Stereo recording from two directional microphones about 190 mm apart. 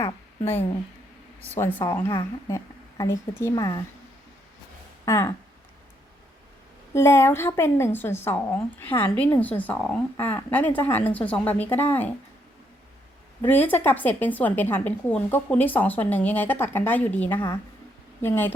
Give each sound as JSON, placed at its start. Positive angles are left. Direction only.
{"t": 1.5, "sound": "a woman's voice", "side_deg": 15}
{"t": 5.0, "sound": "speech", "side_deg": 15}
{"t": 6.9, "sound": "a woman's voice", "side_deg": 15}
{"t": 13.4, "sound": "a woman's voice", "side_deg": 10}